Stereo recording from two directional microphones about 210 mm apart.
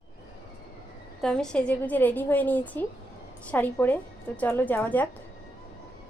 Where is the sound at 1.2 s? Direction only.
5° left (ahead or behind).